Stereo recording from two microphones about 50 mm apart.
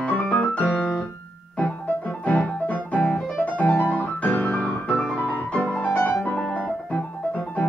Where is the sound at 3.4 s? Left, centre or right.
Left.